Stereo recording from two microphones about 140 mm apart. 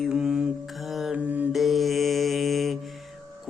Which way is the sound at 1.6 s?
Centre (ahead or behind).